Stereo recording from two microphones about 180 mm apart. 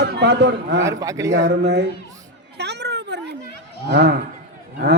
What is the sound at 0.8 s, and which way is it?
Speech, 20° right (ahead or behind).